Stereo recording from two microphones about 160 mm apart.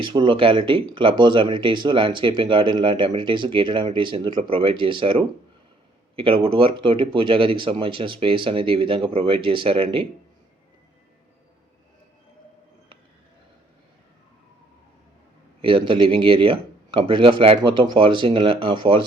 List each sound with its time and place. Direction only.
0.0 s speech: 30° right (ahead or behind)
15.6 s speech: 30° right (ahead or behind)